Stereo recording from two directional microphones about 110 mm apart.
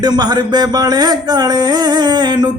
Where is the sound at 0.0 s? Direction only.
40° right (ahead or behind).